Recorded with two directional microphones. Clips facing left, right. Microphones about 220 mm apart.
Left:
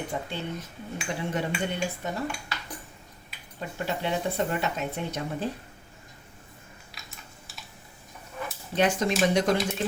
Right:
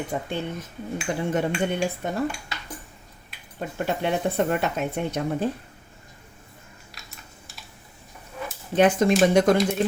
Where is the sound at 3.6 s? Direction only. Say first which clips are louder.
Right 5 dB; 55° right (ahead or behind).